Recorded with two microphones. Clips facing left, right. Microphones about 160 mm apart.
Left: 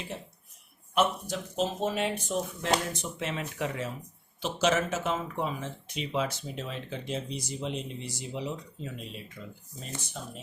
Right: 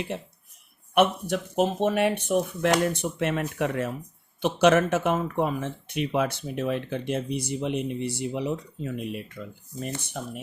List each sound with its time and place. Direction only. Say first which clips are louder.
0.9 s speech: right 6 dB; 60° right (ahead or behind)